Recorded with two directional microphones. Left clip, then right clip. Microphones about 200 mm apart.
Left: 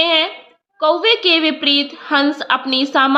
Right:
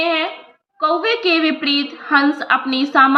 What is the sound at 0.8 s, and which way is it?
A woman's voice, 25° left (ahead or behind).